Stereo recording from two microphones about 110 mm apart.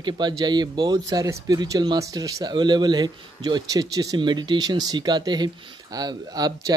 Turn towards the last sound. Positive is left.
turn(degrees=-35)  # may be behind; listen again after turning